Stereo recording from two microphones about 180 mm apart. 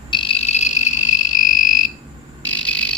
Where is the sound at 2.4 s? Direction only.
5° left (ahead or behind).